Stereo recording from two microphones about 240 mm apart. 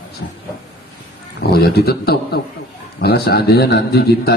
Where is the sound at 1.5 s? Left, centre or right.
Left.